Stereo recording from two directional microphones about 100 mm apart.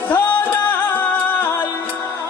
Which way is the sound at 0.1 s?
20° left (ahead or behind).